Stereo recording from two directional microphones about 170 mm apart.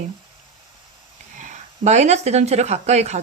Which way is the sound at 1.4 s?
45° right (ahead or behind).